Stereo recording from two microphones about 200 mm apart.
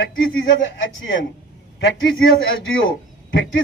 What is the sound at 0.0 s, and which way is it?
Speech, 70° left (ahead or behind).